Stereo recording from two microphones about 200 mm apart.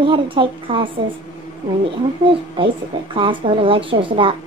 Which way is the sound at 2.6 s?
25° right (ahead or behind).